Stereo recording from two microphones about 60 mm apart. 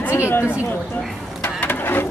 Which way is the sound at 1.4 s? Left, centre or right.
Left.